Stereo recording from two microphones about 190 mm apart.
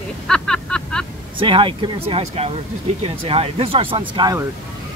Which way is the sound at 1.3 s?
25° right (ahead or behind).